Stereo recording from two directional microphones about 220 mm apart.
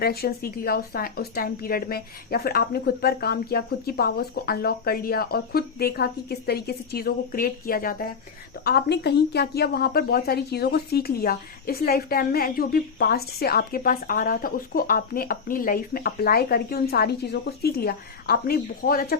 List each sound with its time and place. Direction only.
0.0 s a woman's voice: 45° left (ahead or behind)